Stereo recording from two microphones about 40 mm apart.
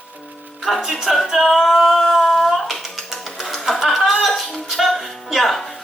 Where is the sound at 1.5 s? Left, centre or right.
Centre.